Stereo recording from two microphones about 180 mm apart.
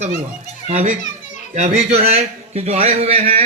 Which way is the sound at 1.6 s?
35° right (ahead or behind).